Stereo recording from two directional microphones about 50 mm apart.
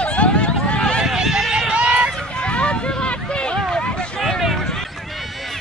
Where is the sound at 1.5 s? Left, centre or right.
Centre.